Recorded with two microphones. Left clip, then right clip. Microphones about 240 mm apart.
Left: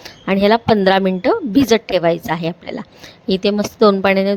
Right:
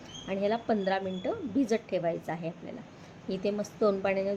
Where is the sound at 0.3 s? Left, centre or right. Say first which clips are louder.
Left 16 dB; left.